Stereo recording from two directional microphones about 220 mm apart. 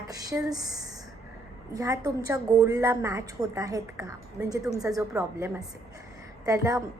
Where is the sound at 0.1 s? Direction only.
15° right (ahead or behind).